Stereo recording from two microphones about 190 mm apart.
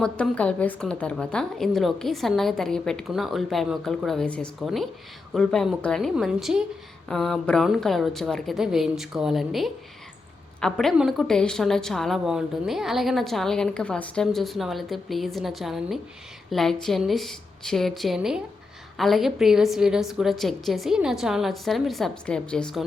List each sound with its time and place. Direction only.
0.0 s a woman's voice: 5° left (ahead or behind)